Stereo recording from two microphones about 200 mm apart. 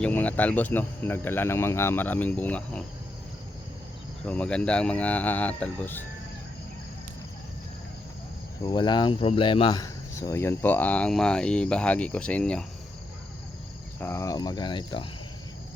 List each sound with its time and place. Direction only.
0.0 s speech: 5° left (ahead or behind)
4.3 s speech: 5° left (ahead or behind)
8.6 s speech: 20° left (ahead or behind); by 12.6 s 5° left (ahead or behind)
14.0 s speech: 15° left (ahead or behind)